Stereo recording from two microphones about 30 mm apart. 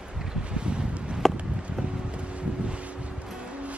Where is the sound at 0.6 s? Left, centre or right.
Right.